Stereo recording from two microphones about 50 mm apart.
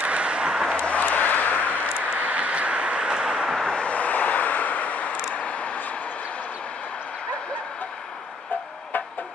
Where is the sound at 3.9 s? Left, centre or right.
Left.